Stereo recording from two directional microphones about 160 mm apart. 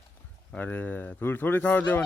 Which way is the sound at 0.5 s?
10° left (ahead or behind).